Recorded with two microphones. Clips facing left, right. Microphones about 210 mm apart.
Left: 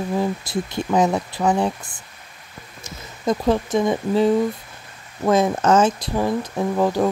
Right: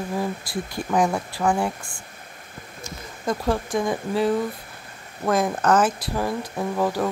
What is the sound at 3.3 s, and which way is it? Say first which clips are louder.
Speech: left 5 dB; 20° left (ahead or behind).